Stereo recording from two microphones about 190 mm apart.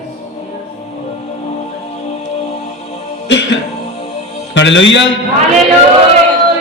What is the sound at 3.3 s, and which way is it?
Music, 70° left (ahead or behind).